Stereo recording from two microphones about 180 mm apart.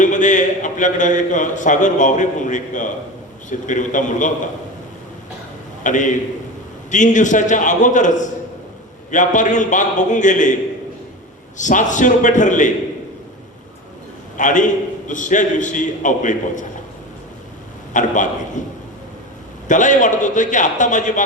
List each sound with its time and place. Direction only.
0.0 s a man's voice: 45° left (ahead or behind)
5.8 s a man's voice: 45° left (ahead or behind)
11.5 s a man's voice: 45° left (ahead or behind)
14.3 s a man's voice: 45° left (ahead or behind)
17.9 s a man's voice: 45° left (ahead or behind)
19.6 s a man's voice: 45° left (ahead or behind)